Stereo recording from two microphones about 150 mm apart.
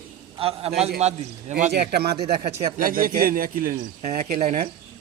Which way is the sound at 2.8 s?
70° right (ahead or behind).